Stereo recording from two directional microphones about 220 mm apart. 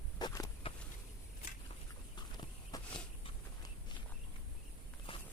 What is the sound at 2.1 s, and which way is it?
Clip-clop, 20° left (ahead or behind).